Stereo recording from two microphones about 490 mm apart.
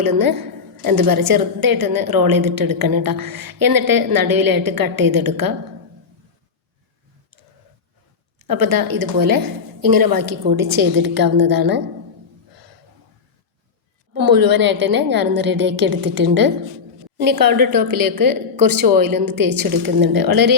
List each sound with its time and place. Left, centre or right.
0.2 s a woman's voice: right
8.4 s a woman's voice: right
14.2 s a woman's voice: right